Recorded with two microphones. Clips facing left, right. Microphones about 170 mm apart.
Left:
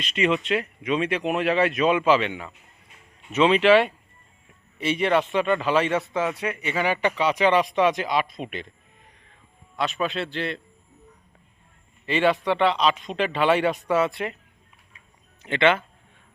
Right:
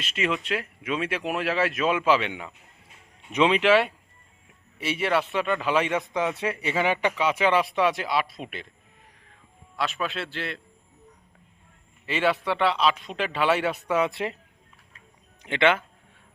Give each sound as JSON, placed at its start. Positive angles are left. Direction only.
{"t": 0.0, "sound": "a man's voice", "side_deg": -5}
{"t": 6.3, "sound": "speech", "side_deg": -30}
{"t": 9.7, "sound": "speech", "side_deg": 0}
{"t": 12.0, "sound": "a man's voice", "side_deg": -5}
{"t": 14.1, "sound": "speech", "side_deg": -25}
{"t": 15.4, "sound": "a man's voice", "side_deg": -10}